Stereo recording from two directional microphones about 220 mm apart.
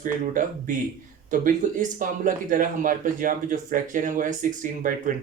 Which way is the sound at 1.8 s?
35° right (ahead or behind).